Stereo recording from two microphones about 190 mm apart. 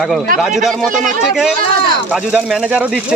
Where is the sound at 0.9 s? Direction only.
45° right (ahead or behind).